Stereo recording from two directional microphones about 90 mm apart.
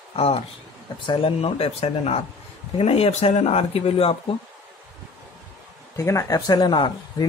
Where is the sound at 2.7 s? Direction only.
90° left.